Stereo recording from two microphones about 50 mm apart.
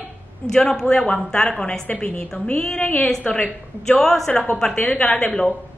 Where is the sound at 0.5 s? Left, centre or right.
Centre; by 3.5 s left.